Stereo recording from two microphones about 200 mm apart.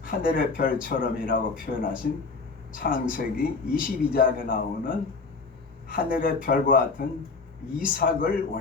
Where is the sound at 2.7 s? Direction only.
45° left (ahead or behind).